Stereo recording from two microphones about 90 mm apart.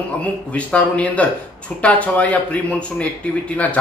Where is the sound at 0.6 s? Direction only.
15° left (ahead or behind).